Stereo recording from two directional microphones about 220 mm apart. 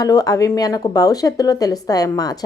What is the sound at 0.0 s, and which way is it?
A woman's voice, 15° left (ahead or behind).